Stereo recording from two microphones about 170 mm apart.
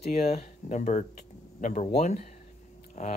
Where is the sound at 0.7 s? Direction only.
45° left (ahead or behind).